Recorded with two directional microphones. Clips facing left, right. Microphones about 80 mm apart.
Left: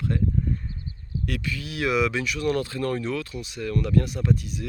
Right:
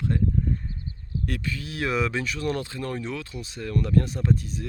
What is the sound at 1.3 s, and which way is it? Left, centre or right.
Speech, right.